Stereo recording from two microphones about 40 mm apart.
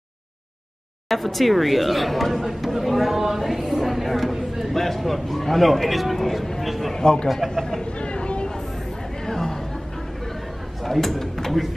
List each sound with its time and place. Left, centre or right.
1.0 s speech: centre
4.7 s a man's voice: centre
6.7 s a sound: centre
7.0 s a man's voice: centre
7.2 s a man's voice: centre
8.0 s vehicle: left
9.2 s a sound: centre
10.8 s speech: centre